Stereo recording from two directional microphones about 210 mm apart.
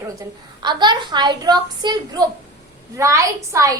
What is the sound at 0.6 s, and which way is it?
A woman's voice, 20° right (ahead or behind).